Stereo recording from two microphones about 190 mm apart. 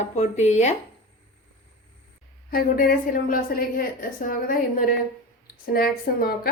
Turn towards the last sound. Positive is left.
turn(degrees=55)  # may be behind; listen again after turning